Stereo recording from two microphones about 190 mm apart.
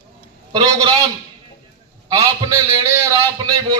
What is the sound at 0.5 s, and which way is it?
Speech, 20° right (ahead or behind).